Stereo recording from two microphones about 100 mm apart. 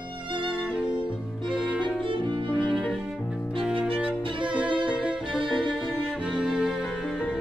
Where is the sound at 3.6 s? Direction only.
15° right (ahead or behind).